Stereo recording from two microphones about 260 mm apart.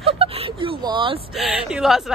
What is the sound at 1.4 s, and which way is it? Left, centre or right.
Speech, centre.